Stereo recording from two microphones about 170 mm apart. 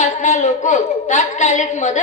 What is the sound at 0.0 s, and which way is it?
A woman's voice, 45° left (ahead or behind).